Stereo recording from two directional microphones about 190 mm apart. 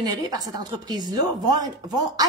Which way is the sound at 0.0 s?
20° right (ahead or behind).